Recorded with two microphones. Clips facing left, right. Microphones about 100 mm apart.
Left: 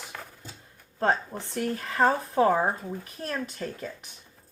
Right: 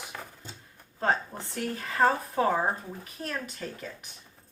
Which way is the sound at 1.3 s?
20° left (ahead or behind).